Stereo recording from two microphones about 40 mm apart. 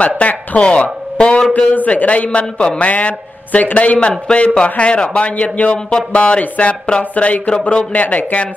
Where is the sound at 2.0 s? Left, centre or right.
Left.